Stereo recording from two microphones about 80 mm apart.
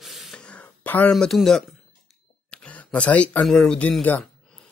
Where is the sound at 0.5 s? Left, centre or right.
Centre.